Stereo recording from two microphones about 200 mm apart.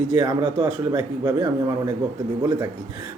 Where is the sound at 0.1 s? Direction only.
20° right (ahead or behind).